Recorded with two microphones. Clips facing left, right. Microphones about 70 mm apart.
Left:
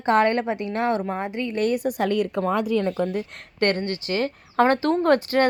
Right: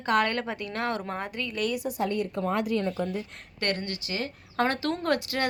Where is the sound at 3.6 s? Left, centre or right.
Left.